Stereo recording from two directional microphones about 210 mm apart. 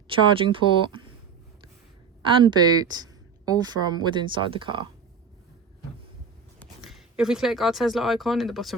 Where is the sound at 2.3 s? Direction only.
20° right (ahead or behind).